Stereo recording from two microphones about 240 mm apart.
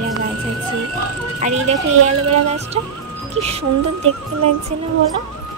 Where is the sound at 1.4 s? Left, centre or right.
Right.